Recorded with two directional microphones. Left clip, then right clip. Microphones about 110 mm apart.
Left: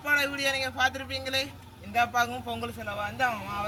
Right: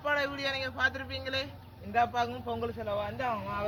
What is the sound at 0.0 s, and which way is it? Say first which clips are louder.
A man's voice: left 4 dB; 25° right (ahead or behind).